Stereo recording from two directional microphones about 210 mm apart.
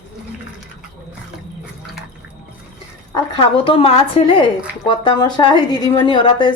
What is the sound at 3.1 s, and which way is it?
A woman's voice, 20° left (ahead or behind).